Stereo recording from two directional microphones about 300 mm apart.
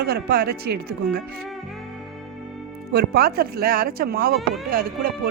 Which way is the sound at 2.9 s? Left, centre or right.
Right.